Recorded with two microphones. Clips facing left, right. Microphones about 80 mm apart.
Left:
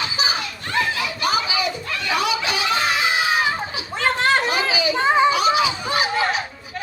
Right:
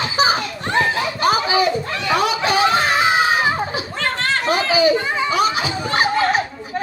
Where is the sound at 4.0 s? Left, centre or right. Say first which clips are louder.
Left 3 dB; centre.